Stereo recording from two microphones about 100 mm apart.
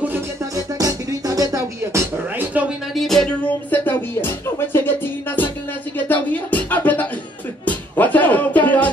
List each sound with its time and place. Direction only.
0.7 s music: 35° right (ahead or behind)
2.3 s a sound: 20° right (ahead or behind)
2.9 s music: centre (ahead or behind); by 5.5 s 20° left (ahead or behind)
5.9 s beatboxing: 15° left (ahead or behind)
7.6 s music: 15° left (ahead or behind)